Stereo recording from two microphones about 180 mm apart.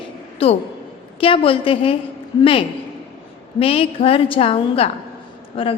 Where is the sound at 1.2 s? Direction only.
30° left (ahead or behind).